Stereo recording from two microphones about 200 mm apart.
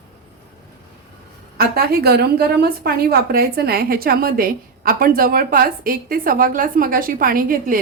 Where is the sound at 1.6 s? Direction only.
50° right (ahead or behind).